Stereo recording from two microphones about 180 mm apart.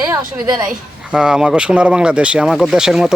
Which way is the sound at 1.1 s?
5° right (ahead or behind).